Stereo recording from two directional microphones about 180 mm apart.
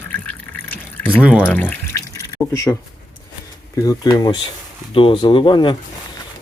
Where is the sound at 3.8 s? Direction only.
20° left (ahead or behind).